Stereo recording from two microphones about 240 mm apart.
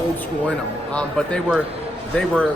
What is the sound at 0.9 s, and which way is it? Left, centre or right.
Speech, centre.